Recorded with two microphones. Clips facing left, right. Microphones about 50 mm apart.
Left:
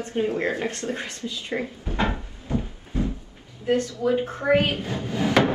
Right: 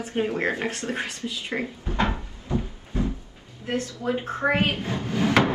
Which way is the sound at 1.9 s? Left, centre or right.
Left.